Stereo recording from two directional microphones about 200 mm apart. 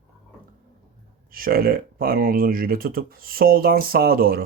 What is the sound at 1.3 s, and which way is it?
Speech, 45° right (ahead or behind).